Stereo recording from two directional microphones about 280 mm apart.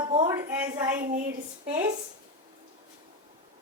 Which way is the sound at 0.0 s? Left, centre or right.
Right.